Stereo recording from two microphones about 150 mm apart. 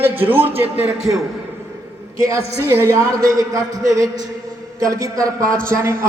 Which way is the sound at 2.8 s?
20° right (ahead or behind).